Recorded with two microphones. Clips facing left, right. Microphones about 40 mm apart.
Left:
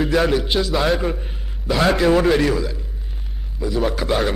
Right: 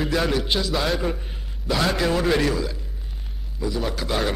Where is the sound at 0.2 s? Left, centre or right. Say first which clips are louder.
Left 4 dB; centre.